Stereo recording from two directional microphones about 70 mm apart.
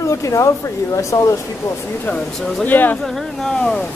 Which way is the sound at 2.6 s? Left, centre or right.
Left.